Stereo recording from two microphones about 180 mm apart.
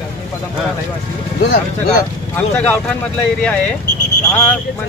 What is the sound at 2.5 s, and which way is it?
Speech, 10° left (ahead or behind).